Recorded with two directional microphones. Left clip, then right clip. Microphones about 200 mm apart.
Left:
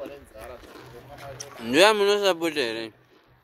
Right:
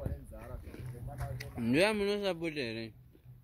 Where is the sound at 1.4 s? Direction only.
15° left (ahead or behind).